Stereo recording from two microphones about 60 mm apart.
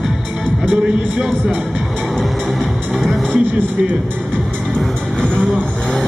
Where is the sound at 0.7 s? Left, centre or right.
Centre.